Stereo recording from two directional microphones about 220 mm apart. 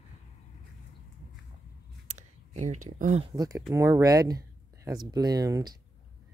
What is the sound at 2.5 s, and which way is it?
Speech, 30° right (ahead or behind).